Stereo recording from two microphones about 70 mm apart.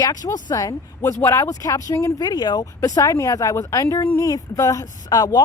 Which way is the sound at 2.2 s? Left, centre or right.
Left.